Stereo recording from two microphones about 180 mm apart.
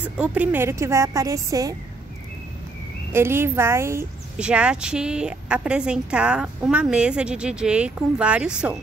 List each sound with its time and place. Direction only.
0.0 s a woman's voice: 10° right (ahead or behind)
3.1 s speech: 15° right (ahead or behind)